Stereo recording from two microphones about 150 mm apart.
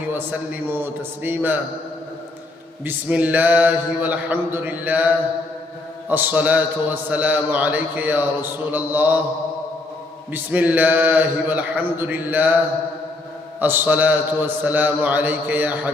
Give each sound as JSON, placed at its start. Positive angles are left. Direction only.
{"t": 0.1, "sound": "a man's voice", "side_deg": -15}
{"t": 2.8, "sound": "a man's voice", "side_deg": -10}
{"t": 10.3, "sound": "a man's voice", "side_deg": -10}
{"t": 13.6, "sound": "a man's voice", "side_deg": -10}